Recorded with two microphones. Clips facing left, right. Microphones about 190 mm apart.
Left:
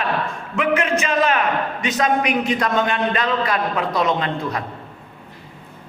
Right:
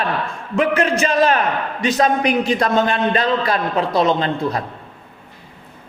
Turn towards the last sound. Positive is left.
turn(degrees=-35)  # may be behind; listen again after turning